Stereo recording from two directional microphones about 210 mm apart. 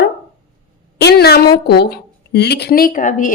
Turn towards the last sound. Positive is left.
turn(degrees=40)  # may be behind; listen again after turning